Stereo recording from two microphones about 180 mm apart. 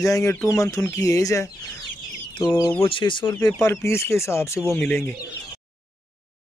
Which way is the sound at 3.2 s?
10° left (ahead or behind).